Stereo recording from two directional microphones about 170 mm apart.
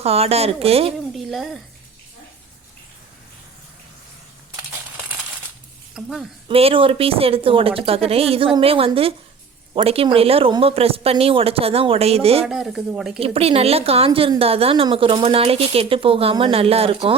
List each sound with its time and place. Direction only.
0.0 s a woman's voice: 35° right (ahead or behind)
1.1 s a woman's voice: centre (ahead or behind)
5.9 s speech: centre (ahead or behind)
6.5 s a woman's voice: 35° right (ahead or behind)
12.5 s speech: 5° right (ahead or behind)
13.1 s a woman's voice: 35° right (ahead or behind)